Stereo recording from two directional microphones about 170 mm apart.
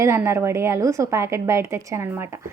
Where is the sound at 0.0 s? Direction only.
15° right (ahead or behind).